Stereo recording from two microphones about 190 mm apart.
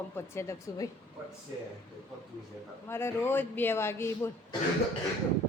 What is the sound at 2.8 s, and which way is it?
A woman's voice, 10° left (ahead or behind).